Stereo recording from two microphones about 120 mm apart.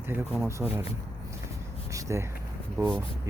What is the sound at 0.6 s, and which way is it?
Speech, 10° right (ahead or behind).